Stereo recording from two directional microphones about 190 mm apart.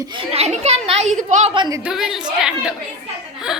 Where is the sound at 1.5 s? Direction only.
25° right (ahead or behind).